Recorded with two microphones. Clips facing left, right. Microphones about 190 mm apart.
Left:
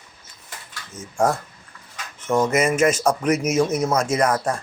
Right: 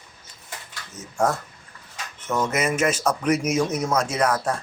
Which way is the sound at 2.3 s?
25° left (ahead or behind).